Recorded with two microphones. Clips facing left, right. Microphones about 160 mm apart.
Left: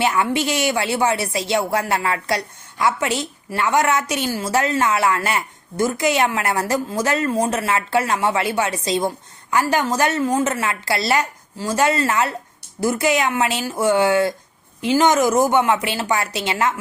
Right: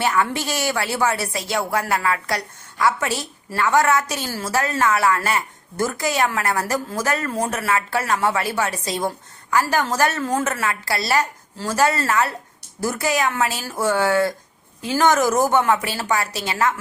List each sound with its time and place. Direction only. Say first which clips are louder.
0.0 s speech: left 2 dB; 20° left (ahead or behind)